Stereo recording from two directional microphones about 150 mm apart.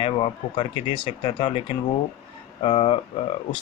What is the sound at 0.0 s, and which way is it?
Speech, 35° left (ahead or behind).